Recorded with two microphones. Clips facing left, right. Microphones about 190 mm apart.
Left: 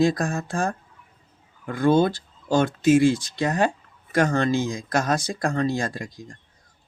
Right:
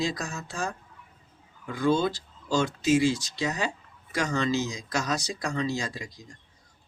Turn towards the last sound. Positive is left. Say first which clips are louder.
# left 5 dB
turn(degrees=55)  # may be behind; listen again after turning